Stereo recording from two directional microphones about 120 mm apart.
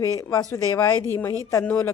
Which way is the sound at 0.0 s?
25° left (ahead or behind).